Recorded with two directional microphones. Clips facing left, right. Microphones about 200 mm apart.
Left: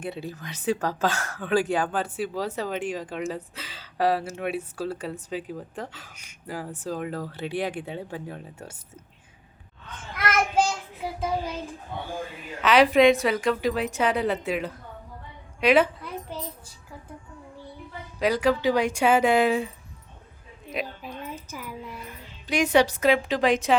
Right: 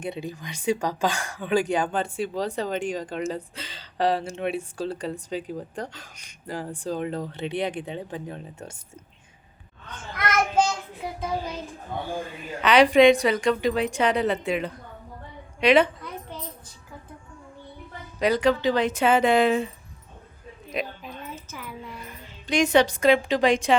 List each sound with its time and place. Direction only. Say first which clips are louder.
0.0 s a woman's voice: right 1 dB; 5° left (ahead or behind)
10.2 s child singing: right 1 dB; 5° left (ahead or behind)
12.6 s a woman's voice: right 2 dB; centre (ahead or behind)
15.6 s a sound: right 1 dB; 5° left (ahead or behind)
18.2 s speech: right 1 dB; 5° left (ahead or behind)
20.7 s a sound: right 1 dB; 5° left (ahead or behind)
22.4 s a woman's voice: right 1 dB; 10° left (ahead or behind)